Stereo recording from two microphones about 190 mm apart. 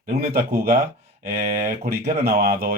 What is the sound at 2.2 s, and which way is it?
Speech, 55° right (ahead or behind).